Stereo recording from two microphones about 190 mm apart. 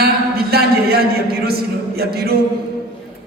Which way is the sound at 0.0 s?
55° right (ahead or behind).